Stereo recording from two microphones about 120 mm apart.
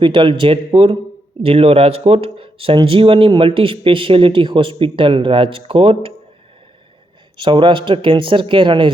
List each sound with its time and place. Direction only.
0.0 s speech: 40° right (ahead or behind)
7.3 s speech: 45° right (ahead or behind)